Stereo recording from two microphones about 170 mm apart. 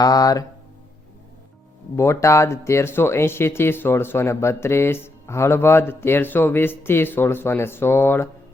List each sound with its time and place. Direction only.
0.0 s speech: 20° left (ahead or behind)
2.0 s speech: 15° left (ahead or behind)